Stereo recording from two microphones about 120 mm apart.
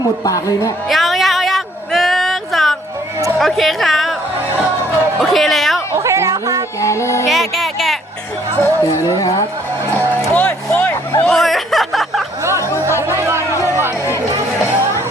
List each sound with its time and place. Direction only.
0.3 s speech: 30° left (ahead or behind)
0.9 s a sound: centre (ahead or behind)
3.3 s a woman's voice: centre (ahead or behind)
5.2 s a sound: centre (ahead or behind)
6.0 s chatter: 25° right (ahead or behind)
6.8 s music: 25° left (ahead or behind)
7.3 s music: centre (ahead or behind)
8.6 s speech: 30° left (ahead or behind)
10.3 s hubbub: 15° left (ahead or behind)
13.0 s chatter: 20° right (ahead or behind)